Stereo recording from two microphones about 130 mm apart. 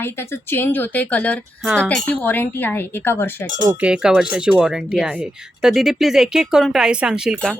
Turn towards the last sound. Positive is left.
turn(degrees=-5)  # may be behind; listen again after turning